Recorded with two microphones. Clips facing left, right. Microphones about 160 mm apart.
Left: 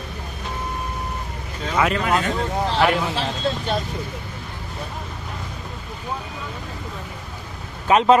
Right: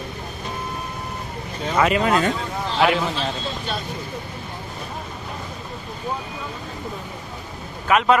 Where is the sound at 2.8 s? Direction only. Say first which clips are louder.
Right 1 dB; centre (ahead or behind).